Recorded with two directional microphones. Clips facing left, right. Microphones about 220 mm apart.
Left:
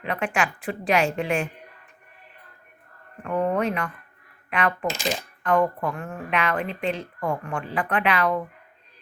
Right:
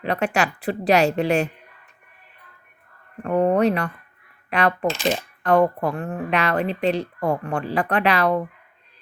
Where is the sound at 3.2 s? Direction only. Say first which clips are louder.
Right 5 dB; 40° right (ahead or behind).